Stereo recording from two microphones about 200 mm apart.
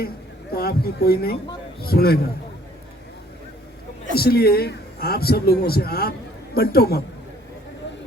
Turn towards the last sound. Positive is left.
turn(degrees=50)  # may be behind; listen again after turning